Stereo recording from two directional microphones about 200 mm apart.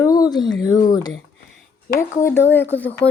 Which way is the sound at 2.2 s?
10° left (ahead or behind).